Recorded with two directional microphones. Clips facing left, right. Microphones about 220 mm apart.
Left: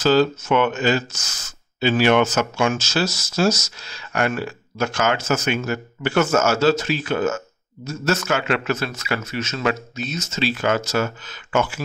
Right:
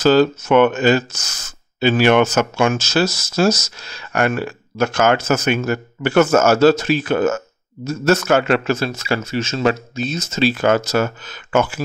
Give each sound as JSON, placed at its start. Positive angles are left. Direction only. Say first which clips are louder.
{"t": 0.0, "sound": "a man's voice", "louder": "right 4 dB", "side_deg": -55}